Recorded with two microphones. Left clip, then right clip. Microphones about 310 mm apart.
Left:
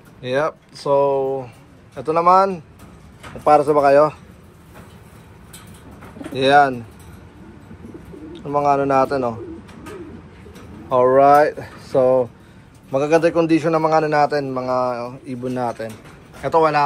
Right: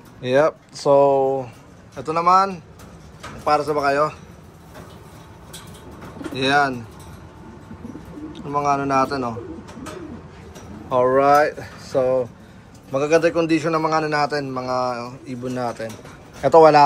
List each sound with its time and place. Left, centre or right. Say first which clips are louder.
0.2 s a man's voice: right 3 dB; centre
6.3 s a man's voice: left 5 dB; centre
8.3 s a man's voice: left 3 dB; centre
10.9 s a man's voice: left 3 dB; centre
16.4 s speech: right 5 dB; centre